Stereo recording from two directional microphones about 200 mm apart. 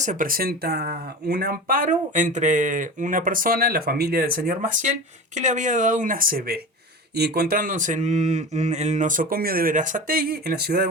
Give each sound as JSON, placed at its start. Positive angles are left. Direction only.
{"t": 0.0, "sound": "speech", "side_deg": -40}